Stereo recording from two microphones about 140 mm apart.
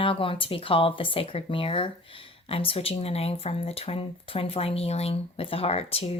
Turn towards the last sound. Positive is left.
turn(degrees=45)  # may be behind; listen again after turning